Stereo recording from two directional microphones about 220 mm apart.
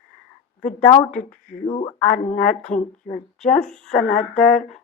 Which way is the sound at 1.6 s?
25° left (ahead or behind).